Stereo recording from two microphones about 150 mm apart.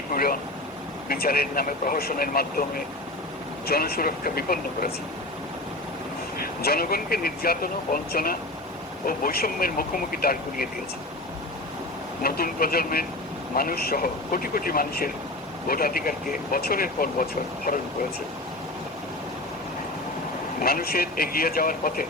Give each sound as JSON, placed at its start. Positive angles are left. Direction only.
{"t": 0.1, "sound": "vehicle", "side_deg": 75}
{"t": 1.0, "sound": "speech", "side_deg": 90}
{"t": 6.4, "sound": "speech", "side_deg": 90}
{"t": 12.2, "sound": "speech", "side_deg": 85}
{"t": 17.7, "sound": "speech", "side_deg": 85}
{"t": 20.6, "sound": "speech", "side_deg": 80}